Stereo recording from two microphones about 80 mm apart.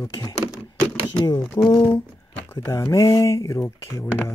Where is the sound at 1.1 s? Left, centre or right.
Left.